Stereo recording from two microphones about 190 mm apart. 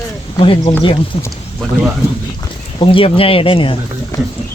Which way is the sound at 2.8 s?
30° left (ahead or behind).